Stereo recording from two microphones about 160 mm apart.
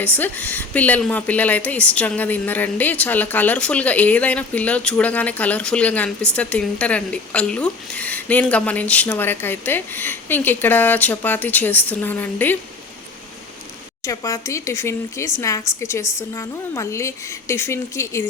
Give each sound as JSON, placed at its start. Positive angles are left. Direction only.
{"t": 0.0, "sound": "speech", "side_deg": 10}
{"t": 14.0, "sound": "speech", "side_deg": 20}